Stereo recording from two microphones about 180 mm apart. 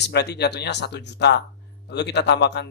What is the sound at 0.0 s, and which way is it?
A man's voice, 65° left (ahead or behind).